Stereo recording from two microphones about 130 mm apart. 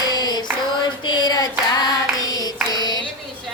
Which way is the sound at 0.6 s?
35° left (ahead or behind).